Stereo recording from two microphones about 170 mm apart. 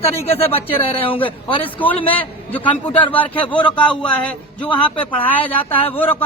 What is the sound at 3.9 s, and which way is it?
Speech, 5° left (ahead or behind).